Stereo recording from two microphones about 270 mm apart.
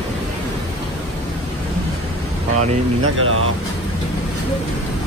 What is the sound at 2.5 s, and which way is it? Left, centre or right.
Speech, right.